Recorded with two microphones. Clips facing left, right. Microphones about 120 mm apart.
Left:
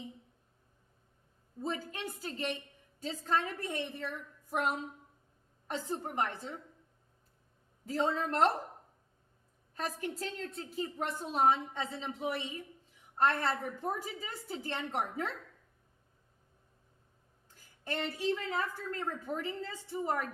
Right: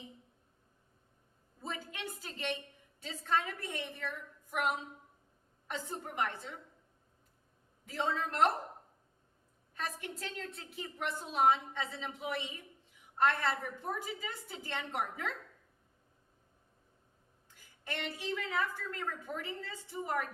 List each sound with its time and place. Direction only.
1.6 s a woman's voice: 35° left (ahead or behind)
5.6 s a woman's voice: 35° left (ahead or behind)
7.9 s a woman's voice: 35° left (ahead or behind)
9.7 s a woman's voice: 35° left (ahead or behind)
17.5 s a woman's voice: 35° left (ahead or behind)